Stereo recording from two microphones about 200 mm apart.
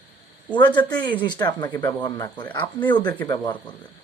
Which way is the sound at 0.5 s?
25° left (ahead or behind).